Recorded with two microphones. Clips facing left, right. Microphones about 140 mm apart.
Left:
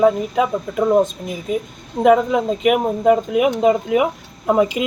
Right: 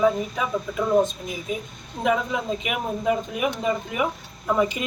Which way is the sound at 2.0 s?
65° left (ahead or behind).